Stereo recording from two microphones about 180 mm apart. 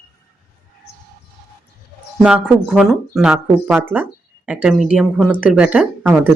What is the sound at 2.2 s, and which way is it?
Speech, 5° right (ahead or behind).